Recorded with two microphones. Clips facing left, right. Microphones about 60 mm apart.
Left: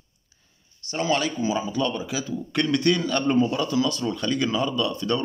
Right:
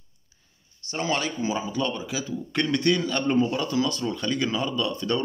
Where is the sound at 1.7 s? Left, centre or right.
Centre; by 4.0 s right.